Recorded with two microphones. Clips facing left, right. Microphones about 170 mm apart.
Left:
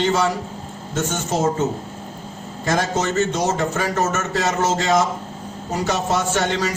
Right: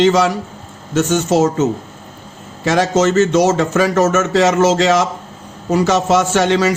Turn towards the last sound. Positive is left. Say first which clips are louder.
# right 7 dB
turn(degrees=-80)